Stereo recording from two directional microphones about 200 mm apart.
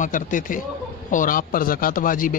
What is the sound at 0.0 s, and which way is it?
Speech, 40° left (ahead or behind).